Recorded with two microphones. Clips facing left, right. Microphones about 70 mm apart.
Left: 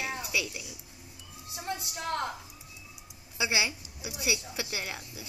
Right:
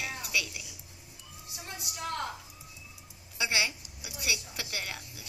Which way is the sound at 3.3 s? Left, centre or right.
Centre.